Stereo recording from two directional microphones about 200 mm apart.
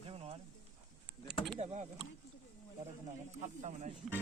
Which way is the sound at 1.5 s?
35° right (ahead or behind).